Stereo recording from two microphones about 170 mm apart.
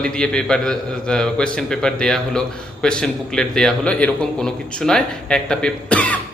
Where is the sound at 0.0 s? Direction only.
5° left (ahead or behind).